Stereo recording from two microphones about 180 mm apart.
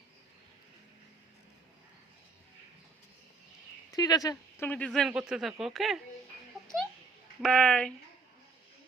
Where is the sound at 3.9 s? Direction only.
20° left (ahead or behind).